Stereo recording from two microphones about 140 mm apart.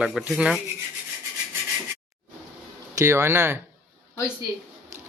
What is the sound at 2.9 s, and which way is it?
Speech, 20° right (ahead or behind).